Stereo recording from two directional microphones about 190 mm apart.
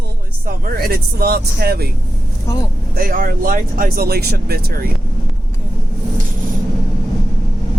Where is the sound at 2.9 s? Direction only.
50° right (ahead or behind).